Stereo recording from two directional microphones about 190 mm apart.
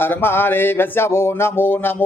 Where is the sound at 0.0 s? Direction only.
10° left (ahead or behind).